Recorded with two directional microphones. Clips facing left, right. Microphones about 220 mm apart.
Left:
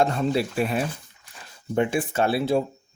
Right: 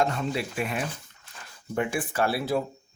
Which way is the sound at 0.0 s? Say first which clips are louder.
Left 5 dB; 35° left (ahead or behind).